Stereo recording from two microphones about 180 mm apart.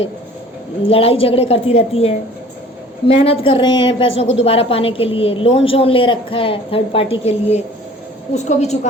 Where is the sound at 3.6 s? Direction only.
90° left.